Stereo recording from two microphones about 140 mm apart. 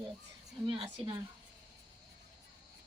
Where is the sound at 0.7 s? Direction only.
35° right (ahead or behind).